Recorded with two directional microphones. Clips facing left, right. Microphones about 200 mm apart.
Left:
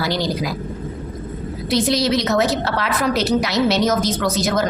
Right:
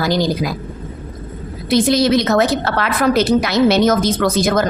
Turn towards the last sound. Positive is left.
turn(degrees=-50)  # may be behind; listen again after turning